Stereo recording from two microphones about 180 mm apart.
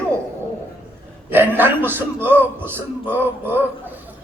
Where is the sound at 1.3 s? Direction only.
10° right (ahead or behind).